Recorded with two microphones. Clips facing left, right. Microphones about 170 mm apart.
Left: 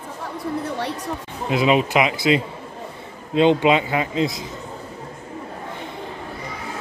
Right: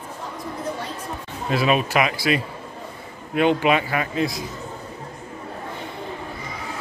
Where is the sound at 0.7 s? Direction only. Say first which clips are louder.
Left 5 dB; 70° left (ahead or behind).